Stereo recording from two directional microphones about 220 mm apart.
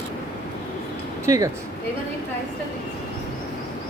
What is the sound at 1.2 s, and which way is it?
Speech, 15° right (ahead or behind).